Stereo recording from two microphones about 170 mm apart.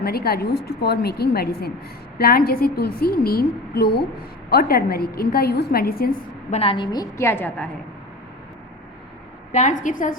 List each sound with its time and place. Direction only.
0.0 s a woman's voice: 65° left (ahead or behind)
6.5 s a woman's voice: 35° left (ahead or behind); by 7.7 s 10° left (ahead or behind)
9.5 s a woman's voice: 45° left (ahead or behind)